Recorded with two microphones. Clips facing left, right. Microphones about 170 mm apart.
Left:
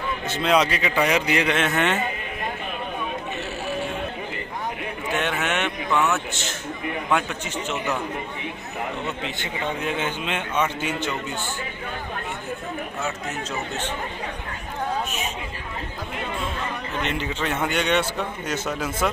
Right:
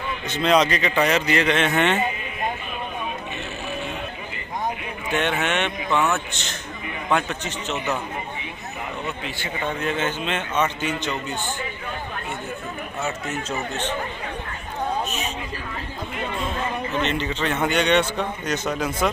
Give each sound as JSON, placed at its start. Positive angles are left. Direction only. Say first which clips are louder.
{"t": 0.3, "sound": "speech", "louder": "right 2 dB", "side_deg": 5}
{"t": 5.1, "sound": "a man's voice", "louder": "right 2 dB", "side_deg": 5}
{"t": 9.0, "sound": "a man's voice", "louder": "left 1 dB", "side_deg": 25}
{"t": 9.8, "sound": "speech", "louder": "right 2 dB", "side_deg": 10}
{"t": 17.0, "sound": "a man's voice", "louder": "even", "side_deg": 10}